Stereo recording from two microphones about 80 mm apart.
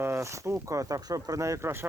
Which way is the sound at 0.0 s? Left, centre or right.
Right.